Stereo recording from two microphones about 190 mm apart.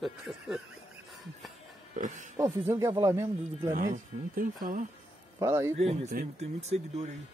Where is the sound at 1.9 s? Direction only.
40° right (ahead or behind).